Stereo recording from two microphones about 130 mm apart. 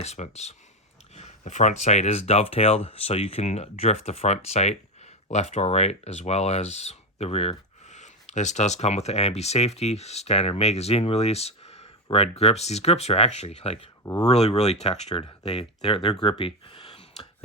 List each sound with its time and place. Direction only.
0.0 s speech: 55° left (ahead or behind)
14.0 s speech: 25° left (ahead or behind)
14.3 s speech: 55° left (ahead or behind)
16.2 s a sound: 45° left (ahead or behind)